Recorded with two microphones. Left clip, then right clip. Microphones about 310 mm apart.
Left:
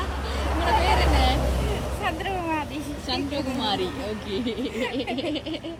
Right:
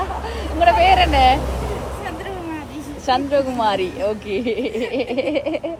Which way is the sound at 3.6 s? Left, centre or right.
Right.